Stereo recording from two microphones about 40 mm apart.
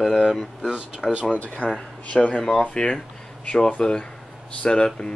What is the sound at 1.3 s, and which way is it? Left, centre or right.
Speech, left.